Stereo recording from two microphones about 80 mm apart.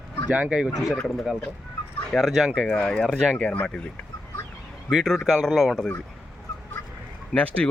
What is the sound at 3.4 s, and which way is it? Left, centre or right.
Speech, centre.